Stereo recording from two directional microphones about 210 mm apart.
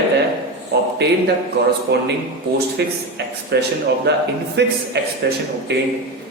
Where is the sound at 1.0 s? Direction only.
50° right (ahead or behind).